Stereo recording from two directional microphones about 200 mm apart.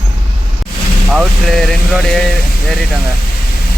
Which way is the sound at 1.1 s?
Centre (ahead or behind).